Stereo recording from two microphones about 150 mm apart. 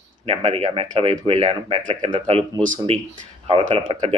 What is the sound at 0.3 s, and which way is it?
Speech, 40° right (ahead or behind).